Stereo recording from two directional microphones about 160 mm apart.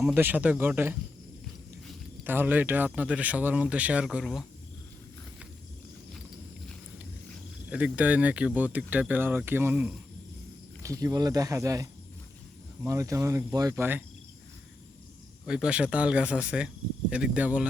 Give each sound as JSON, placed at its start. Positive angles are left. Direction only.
{"t": 0.0, "sound": "speech", "side_deg": -10}
{"t": 2.2, "sound": "speech", "side_deg": -10}
{"t": 7.7, "sound": "speech", "side_deg": -5}
{"t": 10.8, "sound": "speech", "side_deg": -20}
{"t": 15.4, "sound": "speech", "side_deg": -5}